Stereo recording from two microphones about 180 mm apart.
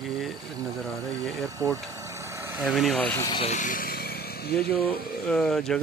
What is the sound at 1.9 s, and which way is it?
Vehicle, 15° right (ahead or behind).